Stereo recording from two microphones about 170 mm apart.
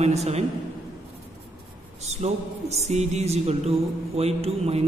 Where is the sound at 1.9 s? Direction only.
40° right (ahead or behind).